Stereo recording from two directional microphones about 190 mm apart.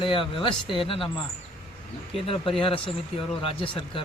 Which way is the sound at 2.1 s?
30° left (ahead or behind).